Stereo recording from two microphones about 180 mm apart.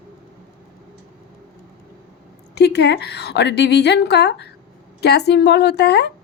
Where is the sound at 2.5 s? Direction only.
70° left (ahead or behind).